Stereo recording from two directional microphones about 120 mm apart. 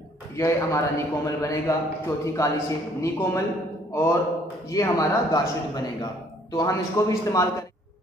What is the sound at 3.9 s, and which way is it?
Mantra, 20° left (ahead or behind).